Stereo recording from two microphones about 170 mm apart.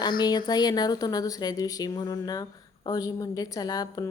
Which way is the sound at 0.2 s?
25° left (ahead or behind).